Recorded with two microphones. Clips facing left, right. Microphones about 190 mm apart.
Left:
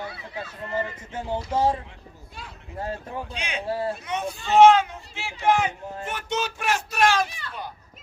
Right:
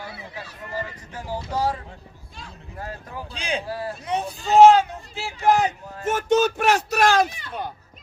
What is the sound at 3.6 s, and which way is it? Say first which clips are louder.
Speech: left 3 dB; 25° left (ahead or behind).